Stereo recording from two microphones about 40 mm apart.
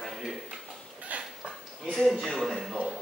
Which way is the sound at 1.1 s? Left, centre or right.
Right.